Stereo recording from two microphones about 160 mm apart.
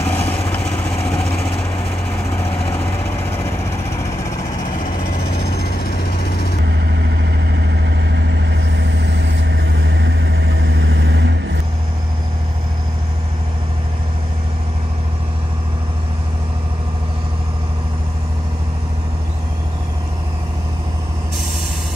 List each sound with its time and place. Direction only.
0.0 s vehicle: 10° left (ahead or behind)
3.1 s vehicle: 15° left (ahead or behind)
4.7 s vehicle: 65° left (ahead or behind); by 6.5 s 85° left
6.6 s vehicle: 90° right